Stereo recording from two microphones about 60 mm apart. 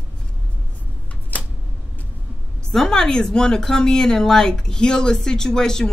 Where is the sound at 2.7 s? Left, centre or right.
Centre.